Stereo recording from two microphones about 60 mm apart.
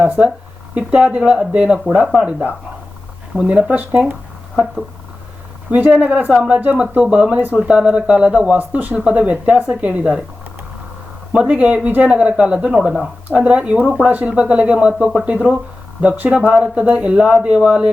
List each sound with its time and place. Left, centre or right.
0.7 s speech: right
5.7 s speech: right
6.6 s speech: right
11.3 s speech: centre